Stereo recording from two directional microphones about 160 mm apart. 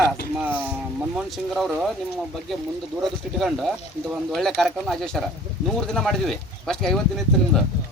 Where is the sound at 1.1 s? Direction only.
Centre (ahead or behind).